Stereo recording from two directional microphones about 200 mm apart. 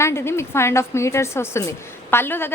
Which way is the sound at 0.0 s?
15° left (ahead or behind).